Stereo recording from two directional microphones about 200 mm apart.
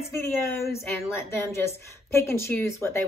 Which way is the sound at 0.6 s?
15° left (ahead or behind).